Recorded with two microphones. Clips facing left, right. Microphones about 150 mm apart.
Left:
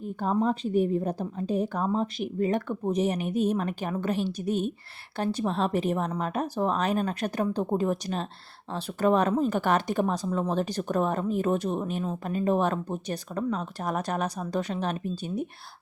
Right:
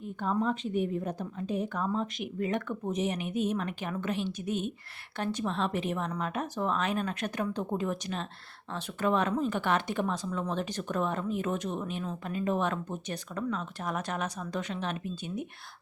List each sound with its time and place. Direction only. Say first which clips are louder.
0.0 s a woman's voice: left 4 dB; 40° left (ahead or behind)